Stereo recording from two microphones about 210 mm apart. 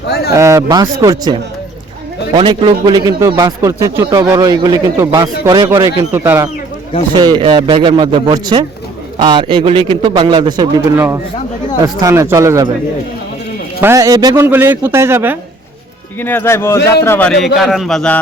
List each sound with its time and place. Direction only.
0.3 s a man's voice: 15° right (ahead or behind)
13.8 s a man's voice: 15° right (ahead or behind)
16.2 s a man's voice: 10° left (ahead or behind)